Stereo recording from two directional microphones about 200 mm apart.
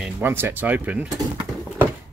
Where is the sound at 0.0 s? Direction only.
10° right (ahead or behind).